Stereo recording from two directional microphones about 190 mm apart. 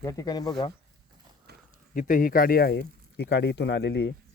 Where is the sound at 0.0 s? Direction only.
20° left (ahead or behind).